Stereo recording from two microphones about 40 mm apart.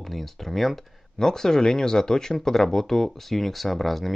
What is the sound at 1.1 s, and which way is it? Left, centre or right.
Speech, centre.